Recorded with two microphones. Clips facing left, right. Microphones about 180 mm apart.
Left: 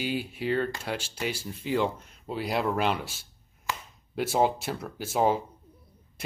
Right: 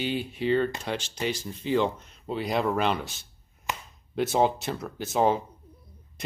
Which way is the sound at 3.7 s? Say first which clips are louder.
Even; 20° right (ahead or behind).